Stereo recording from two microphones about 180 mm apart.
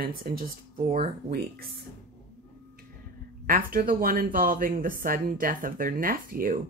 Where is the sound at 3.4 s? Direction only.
50° right (ahead or behind).